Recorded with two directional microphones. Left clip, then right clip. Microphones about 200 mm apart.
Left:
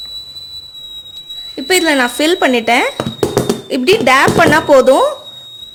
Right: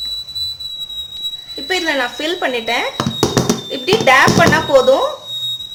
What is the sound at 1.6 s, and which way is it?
Speech, 50° left (ahead or behind).